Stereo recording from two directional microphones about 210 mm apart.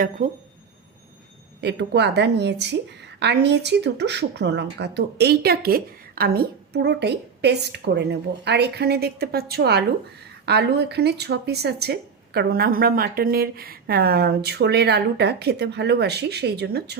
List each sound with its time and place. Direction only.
1.6 s speech: 55° right (ahead or behind)